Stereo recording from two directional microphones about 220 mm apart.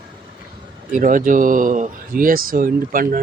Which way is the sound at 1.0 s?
35° right (ahead or behind).